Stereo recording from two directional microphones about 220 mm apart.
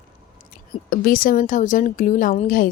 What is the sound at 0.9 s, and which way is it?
Speech, 40° left (ahead or behind).